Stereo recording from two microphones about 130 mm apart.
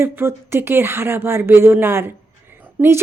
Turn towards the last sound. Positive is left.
turn(degrees=-15)  # may be behind; listen again after turning